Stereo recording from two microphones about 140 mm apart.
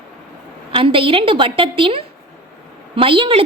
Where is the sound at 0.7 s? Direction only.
40° right (ahead or behind).